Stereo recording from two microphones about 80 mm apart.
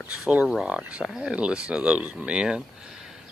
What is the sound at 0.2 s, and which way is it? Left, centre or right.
Speech, centre.